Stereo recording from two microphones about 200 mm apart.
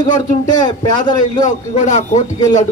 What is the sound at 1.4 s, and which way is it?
A man's voice, 35° left (ahead or behind).